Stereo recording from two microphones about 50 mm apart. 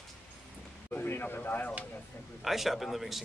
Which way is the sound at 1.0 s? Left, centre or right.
Left.